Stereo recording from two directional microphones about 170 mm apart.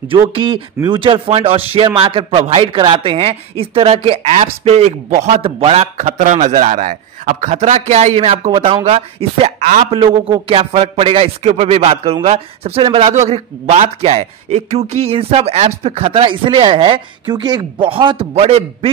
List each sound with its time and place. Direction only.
0.1 s speech: 30° right (ahead or behind)